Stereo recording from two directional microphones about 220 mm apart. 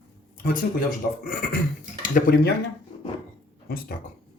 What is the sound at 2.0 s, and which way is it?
Speech, 40° left (ahead or behind).